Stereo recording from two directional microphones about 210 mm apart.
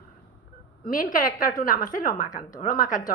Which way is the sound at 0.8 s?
40° left (ahead or behind).